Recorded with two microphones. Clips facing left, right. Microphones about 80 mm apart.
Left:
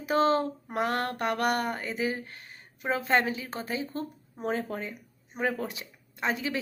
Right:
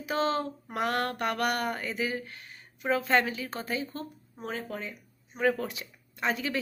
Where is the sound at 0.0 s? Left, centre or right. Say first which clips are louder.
Left 4 dB; left.